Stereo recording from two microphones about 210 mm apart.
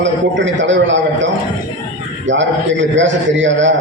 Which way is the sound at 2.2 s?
60° right (ahead or behind).